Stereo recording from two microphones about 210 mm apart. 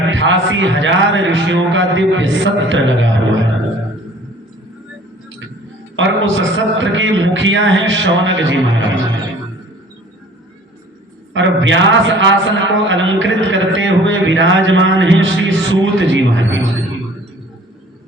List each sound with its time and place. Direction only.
0.1 s a man's voice: 65° right (ahead or behind)
6.0 s a man's voice: 60° right (ahead or behind)
11.3 s a man's voice: 65° right (ahead or behind)